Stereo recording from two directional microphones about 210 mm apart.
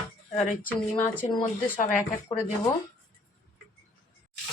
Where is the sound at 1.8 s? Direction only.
40° left (ahead or behind).